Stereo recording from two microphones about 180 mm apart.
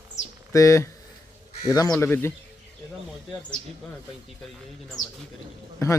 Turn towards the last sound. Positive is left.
turn(degrees=20)  # may be behind; listen again after turning